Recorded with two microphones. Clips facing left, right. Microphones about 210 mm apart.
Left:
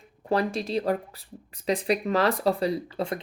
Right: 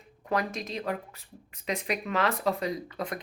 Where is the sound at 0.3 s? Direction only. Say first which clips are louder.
Left 5 dB; 30° left (ahead or behind).